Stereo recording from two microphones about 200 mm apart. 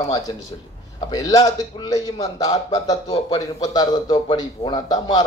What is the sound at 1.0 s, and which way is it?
A man's voice, 20° left (ahead or behind).